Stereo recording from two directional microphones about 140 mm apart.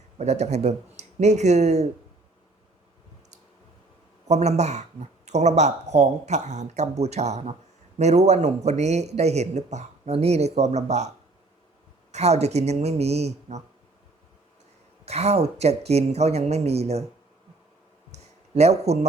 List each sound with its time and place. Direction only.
0.2 s a man's voice: 55° right (ahead or behind)
4.3 s a man's voice: 50° right (ahead or behind)
12.1 s a man's voice: 50° right (ahead or behind)
15.0 s a man's voice: 50° right (ahead or behind)
18.1 s a sound: 50° right (ahead or behind)